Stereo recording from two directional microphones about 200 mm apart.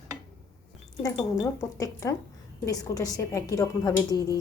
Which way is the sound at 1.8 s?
15° left (ahead or behind).